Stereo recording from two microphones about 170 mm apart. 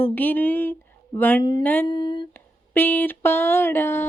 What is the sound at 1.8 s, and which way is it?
Speech, 25° left (ahead or behind).